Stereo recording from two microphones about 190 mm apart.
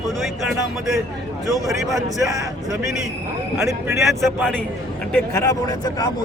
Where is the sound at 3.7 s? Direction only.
15° right (ahead or behind).